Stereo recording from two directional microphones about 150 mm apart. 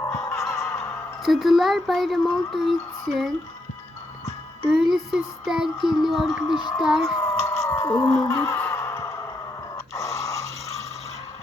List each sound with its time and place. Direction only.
0.4 s music: 5° left (ahead or behind)
1.2 s speech: centre (ahead or behind)
4.7 s speech: 5° right (ahead or behind)
7.2 s a sound: 20° left (ahead or behind)
7.9 s fowl: 20° left (ahead or behind)
8.1 s speech: 5° left (ahead or behind)
8.4 s sigh: 15° left (ahead or behind)
9.9 s a sound: 20° left (ahead or behind)